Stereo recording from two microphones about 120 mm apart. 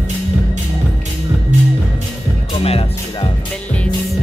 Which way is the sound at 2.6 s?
55° left (ahead or behind).